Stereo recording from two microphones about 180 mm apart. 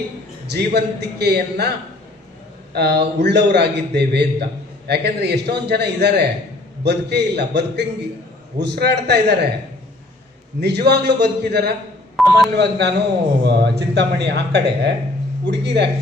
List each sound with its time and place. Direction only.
0.5 s a man's voice: 65° right (ahead or behind)
2.7 s a man's voice: 70° right (ahead or behind)
10.6 s a man's voice: 65° right (ahead or behind)
12.2 s telephone dialing: centre (ahead or behind)
12.5 s a man's voice: 70° right (ahead or behind)